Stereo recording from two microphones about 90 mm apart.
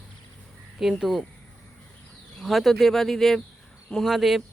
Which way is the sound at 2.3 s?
Centre (ahead or behind).